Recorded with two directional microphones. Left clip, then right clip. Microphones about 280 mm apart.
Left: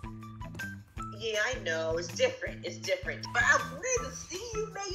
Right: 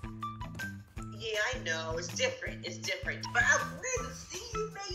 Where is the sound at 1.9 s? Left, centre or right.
Centre.